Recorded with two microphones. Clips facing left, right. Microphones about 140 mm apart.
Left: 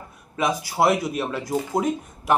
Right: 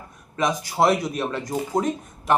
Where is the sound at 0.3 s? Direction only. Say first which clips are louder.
Even; 5° left (ahead or behind).